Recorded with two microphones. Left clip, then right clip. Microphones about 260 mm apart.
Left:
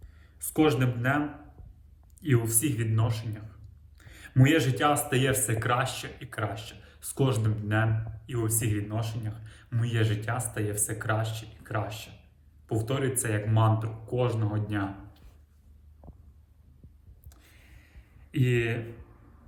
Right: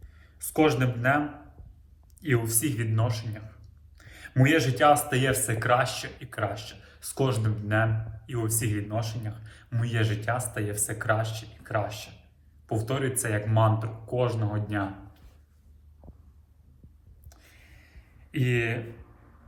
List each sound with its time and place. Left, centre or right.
0.2 s speech: centre
2.2 s speech: centre
4.0 s a sound: centre
5.0 s speech: centre
17.2 s a sound: centre
18.3 s speech: centre